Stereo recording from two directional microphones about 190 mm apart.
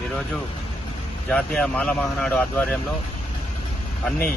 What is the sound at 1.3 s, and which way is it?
Speech, 5° left (ahead or behind).